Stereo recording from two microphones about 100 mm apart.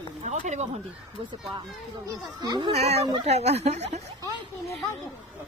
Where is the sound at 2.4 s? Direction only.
50° right (ahead or behind).